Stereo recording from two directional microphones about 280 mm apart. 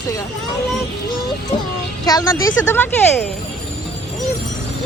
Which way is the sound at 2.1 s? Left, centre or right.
Centre.